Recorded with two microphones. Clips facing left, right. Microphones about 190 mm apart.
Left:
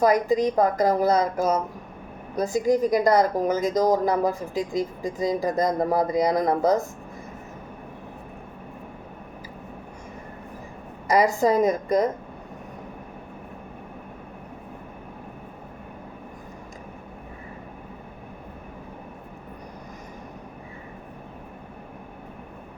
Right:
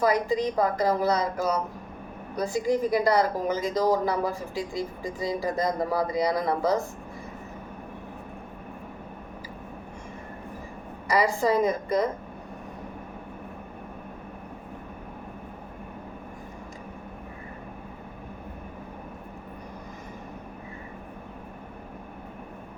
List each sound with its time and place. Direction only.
0.0 s a woman's voice: 45° left (ahead or behind)
5.2 s a woman's voice: 45° left (ahead or behind)
11.1 s a woman's voice: 45° left (ahead or behind)